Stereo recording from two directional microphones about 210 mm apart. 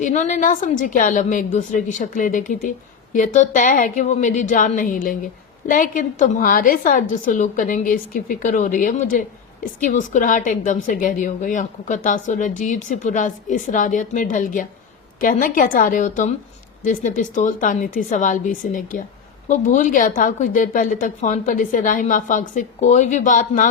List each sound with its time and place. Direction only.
0.0 s a woman's voice: 35° left (ahead or behind)